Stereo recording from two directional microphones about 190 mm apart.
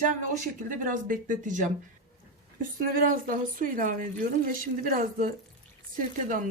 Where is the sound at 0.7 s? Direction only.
45° right (ahead or behind).